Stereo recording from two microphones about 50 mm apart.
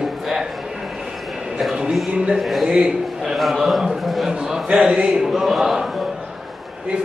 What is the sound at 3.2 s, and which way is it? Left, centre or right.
A man's voice, centre.